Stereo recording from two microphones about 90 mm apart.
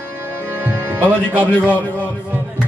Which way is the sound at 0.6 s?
20° right (ahead or behind).